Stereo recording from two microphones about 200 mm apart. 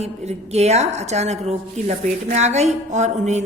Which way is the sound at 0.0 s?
35° right (ahead or behind).